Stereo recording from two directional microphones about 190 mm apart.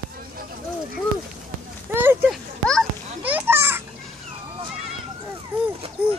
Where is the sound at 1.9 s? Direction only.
10° right (ahead or behind).